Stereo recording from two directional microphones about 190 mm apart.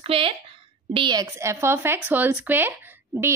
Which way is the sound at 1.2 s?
15° right (ahead or behind).